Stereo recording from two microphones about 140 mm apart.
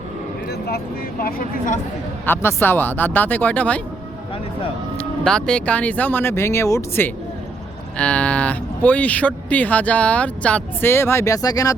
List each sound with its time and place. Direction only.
1.2 s speech: 80° left
2.2 s speech: 15° left (ahead or behind)
4.9 s speech: 5° left (ahead or behind)
7.9 s speech: 10° left (ahead or behind); by 11.7 s 25° left (ahead or behind)